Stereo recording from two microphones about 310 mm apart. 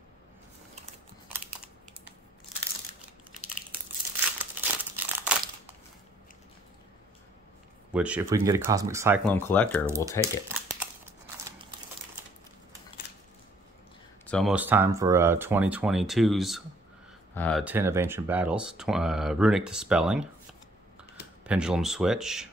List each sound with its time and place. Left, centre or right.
1.3 s computer keyboard: centre
4.4 s crumpling: centre
7.9 s speech: centre
9.2 s speech: centre
9.8 s speech: centre
10.2 s crumpling: centre
14.2 s speech: centre
21.5 s speech: centre